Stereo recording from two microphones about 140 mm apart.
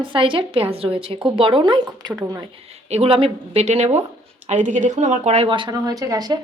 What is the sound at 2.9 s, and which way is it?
A woman's voice, 45° right (ahead or behind).